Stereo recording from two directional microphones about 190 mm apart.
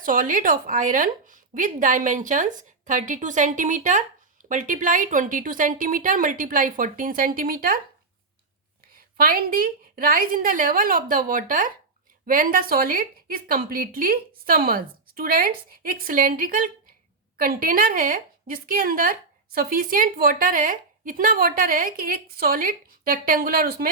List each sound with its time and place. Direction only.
0.0 s a woman's voice: 45° right (ahead or behind)
9.1 s a woman's voice: 50° right (ahead or behind)